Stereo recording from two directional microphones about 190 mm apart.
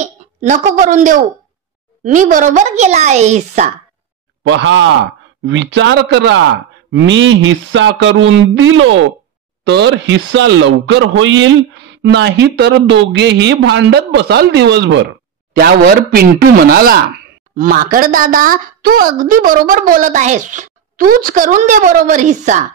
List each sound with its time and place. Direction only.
0.0 s a woman's voice: 40° right (ahead or behind)
4.5 s a man's voice: 75° right (ahead or behind)
6.9 s a sound: 75° right (ahead or behind); by 8.9 s 90° right
9.7 s a man's voice: 65° right (ahead or behind)
15.5 s a woman's voice: 55° right (ahead or behind)